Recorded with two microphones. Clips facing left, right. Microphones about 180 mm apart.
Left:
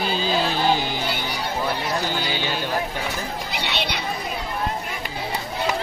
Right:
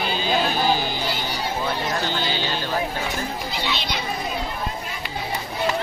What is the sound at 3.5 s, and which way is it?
Chatter, 65° left (ahead or behind).